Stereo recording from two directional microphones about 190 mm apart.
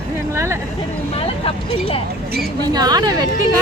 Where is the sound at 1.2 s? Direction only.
30° left (ahead or behind).